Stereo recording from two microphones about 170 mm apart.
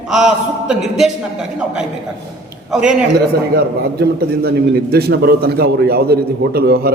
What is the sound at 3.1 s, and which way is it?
A man's voice, 65° right (ahead or behind).